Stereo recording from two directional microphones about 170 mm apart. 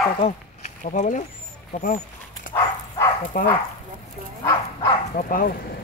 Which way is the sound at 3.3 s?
55° left (ahead or behind).